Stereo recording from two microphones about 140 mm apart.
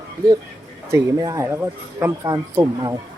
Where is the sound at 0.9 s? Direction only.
25° right (ahead or behind).